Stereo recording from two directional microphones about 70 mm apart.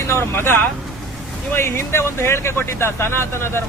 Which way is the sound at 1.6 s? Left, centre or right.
Left.